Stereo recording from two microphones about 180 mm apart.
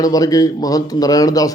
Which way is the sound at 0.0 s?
20° left (ahead or behind).